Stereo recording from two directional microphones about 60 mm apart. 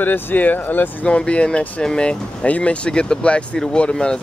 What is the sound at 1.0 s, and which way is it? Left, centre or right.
Speech, centre.